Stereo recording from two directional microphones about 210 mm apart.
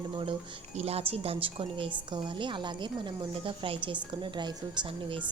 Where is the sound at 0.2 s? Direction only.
25° right (ahead or behind).